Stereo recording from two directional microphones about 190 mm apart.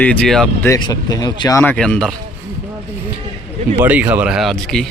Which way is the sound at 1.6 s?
5° left (ahead or behind).